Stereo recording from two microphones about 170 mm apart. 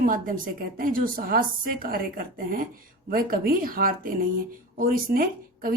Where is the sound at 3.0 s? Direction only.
60° right (ahead or behind).